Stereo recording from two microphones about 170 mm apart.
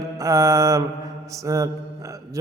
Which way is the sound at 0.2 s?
20° right (ahead or behind).